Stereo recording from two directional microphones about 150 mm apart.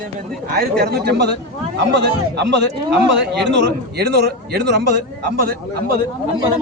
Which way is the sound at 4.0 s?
90° right.